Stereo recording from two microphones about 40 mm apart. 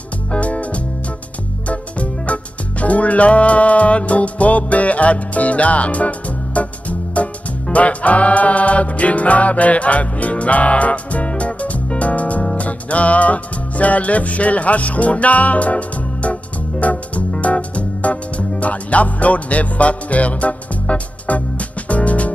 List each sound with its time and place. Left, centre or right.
0.3 s music: left